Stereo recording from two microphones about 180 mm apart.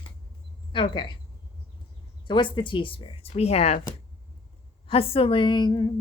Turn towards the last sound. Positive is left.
turn(degrees=20)  # may be behind; listen again after turning